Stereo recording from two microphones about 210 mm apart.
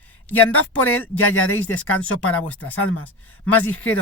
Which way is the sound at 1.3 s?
85° left.